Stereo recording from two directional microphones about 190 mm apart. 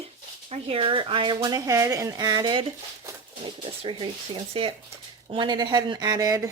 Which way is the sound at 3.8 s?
30° right (ahead or behind).